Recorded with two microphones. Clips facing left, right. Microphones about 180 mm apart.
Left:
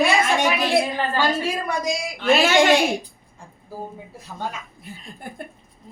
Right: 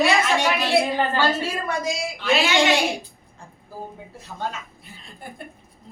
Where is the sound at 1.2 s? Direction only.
15° left (ahead or behind).